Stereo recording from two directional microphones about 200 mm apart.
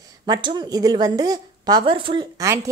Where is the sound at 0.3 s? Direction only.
20° right (ahead or behind).